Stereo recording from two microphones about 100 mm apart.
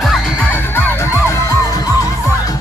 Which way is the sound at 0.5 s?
20° left (ahead or behind).